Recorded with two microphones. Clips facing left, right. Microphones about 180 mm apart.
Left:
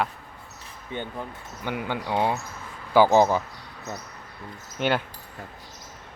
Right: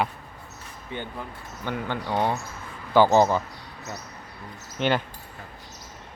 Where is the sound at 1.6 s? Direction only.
10° left (ahead or behind).